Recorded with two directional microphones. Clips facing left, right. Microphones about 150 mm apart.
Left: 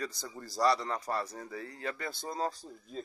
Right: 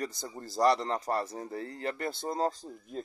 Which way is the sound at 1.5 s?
55° right (ahead or behind).